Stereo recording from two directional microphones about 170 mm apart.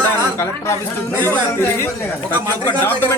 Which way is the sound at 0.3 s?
15° left (ahead or behind).